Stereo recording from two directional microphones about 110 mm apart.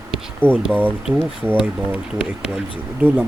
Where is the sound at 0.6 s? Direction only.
15° right (ahead or behind).